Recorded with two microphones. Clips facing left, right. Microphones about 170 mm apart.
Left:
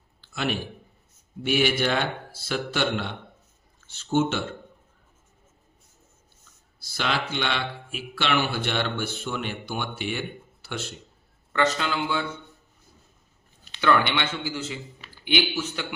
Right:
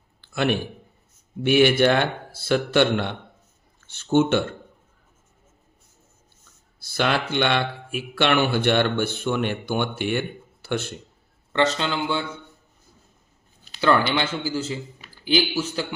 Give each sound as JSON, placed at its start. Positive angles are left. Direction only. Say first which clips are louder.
{"t": 0.2, "sound": "a sound", "louder": "right 6 dB", "side_deg": -60}
{"t": 1.5, "sound": "speech", "louder": "right 7 dB", "side_deg": -60}
{"t": 6.7, "sound": "speech", "louder": "right 5 dB", "side_deg": -60}
{"t": 11.5, "sound": "a man's voice", "louder": "right 2 dB", "side_deg": -30}
{"t": 13.7, "sound": "a sound", "louder": "right 2 dB", "side_deg": -35}
{"t": 14.1, "sound": "speech", "louder": "right 4 dB", "side_deg": -35}